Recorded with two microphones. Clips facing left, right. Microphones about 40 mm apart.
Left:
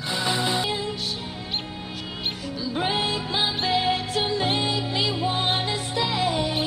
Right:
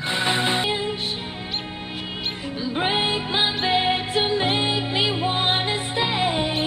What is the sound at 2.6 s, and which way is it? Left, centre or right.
Music, right.